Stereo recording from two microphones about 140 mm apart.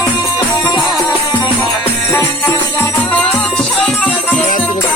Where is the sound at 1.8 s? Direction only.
15° left (ahead or behind).